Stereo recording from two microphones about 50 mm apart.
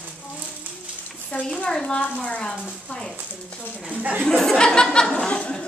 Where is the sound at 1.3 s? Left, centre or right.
Left.